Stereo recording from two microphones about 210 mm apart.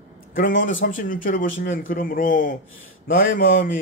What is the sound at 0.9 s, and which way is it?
Speech, 40° left (ahead or behind).